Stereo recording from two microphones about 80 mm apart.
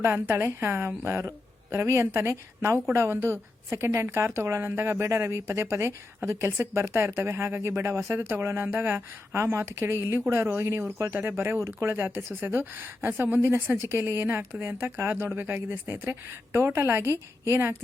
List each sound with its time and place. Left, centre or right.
0.0 s a woman's voice: right
9.3 s a woman's voice: right